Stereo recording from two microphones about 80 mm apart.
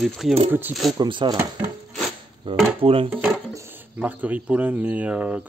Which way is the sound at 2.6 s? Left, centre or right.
Right.